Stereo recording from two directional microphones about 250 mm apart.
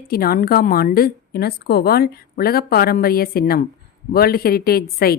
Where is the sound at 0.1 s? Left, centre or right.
Left.